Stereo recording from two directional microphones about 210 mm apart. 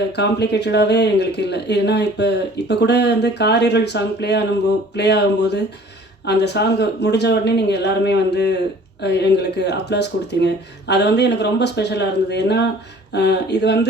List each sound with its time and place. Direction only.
0.2 s speech: 50° left (ahead or behind)